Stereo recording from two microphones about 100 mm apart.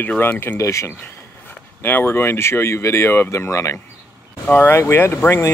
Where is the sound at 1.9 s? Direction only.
20° left (ahead or behind).